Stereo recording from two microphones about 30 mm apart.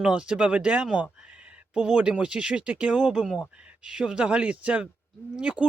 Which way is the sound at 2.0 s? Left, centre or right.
Right.